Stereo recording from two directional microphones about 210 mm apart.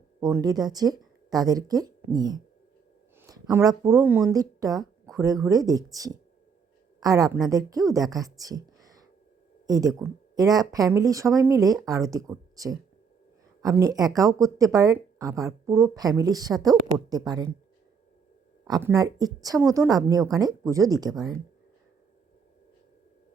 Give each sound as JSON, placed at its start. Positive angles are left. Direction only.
{"t": 0.2, "sound": "speech", "side_deg": -15}
{"t": 3.2, "sound": "a sound", "side_deg": -15}
{"t": 3.4, "sound": "speech", "side_deg": -15}
{"t": 18.6, "sound": "speech", "side_deg": -15}